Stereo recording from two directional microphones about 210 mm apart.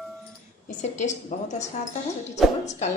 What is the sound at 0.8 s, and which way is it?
Speech, 35° left (ahead or behind).